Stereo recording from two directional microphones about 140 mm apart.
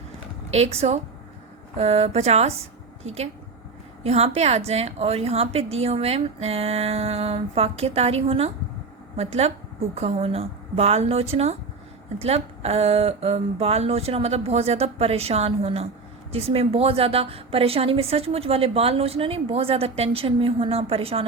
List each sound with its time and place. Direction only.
0.5 s a woman's voice: 45° right (ahead or behind)
4.0 s a woman's voice: 50° right (ahead or behind)